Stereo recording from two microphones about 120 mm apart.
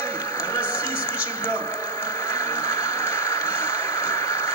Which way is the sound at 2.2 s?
20° left (ahead or behind).